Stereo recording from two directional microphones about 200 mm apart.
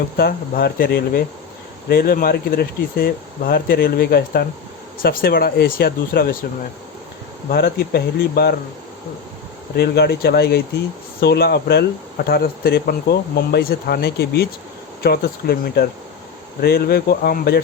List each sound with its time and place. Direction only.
0.2 s speech: 50° left (ahead or behind)
7.5 s speech: 50° left (ahead or behind)
9.7 s speech: 50° left (ahead or behind)